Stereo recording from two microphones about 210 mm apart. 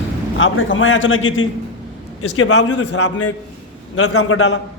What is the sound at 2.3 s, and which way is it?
A man's voice, 85° left.